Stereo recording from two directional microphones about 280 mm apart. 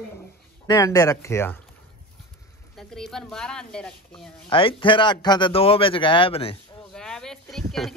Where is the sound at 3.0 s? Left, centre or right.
Centre.